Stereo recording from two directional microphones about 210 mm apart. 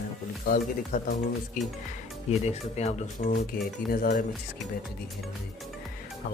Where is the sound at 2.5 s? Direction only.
30° left (ahead or behind).